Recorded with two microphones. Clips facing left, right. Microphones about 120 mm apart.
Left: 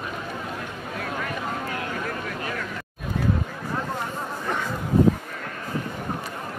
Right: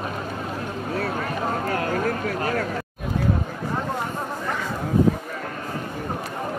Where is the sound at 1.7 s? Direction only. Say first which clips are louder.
Right 6 dB; 45° right (ahead or behind).